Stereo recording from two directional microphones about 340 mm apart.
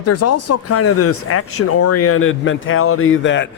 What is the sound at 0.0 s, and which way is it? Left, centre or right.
Speech, left.